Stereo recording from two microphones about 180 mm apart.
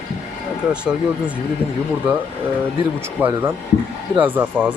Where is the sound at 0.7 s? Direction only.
5° right (ahead or behind).